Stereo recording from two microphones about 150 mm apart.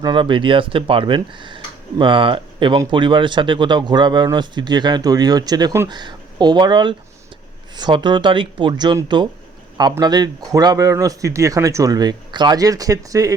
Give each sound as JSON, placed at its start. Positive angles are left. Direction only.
{"t": 0.0, "sound": "speech", "side_deg": -35}